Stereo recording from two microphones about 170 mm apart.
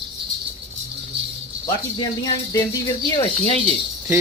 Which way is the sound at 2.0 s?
25° left (ahead or behind).